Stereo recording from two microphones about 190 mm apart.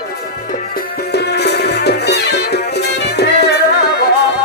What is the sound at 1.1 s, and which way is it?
Music, 60° left (ahead or behind).